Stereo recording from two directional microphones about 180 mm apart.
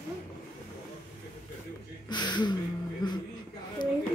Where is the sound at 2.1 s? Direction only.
25° left (ahead or behind).